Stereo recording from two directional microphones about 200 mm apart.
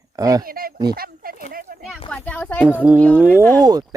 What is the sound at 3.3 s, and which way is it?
Speech, 10° left (ahead or behind).